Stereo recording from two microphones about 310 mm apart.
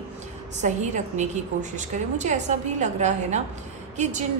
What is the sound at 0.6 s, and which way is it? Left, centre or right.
A woman's voice, right.